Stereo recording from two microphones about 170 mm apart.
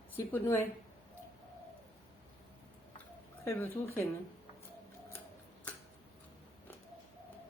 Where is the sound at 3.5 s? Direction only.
15° left (ahead or behind).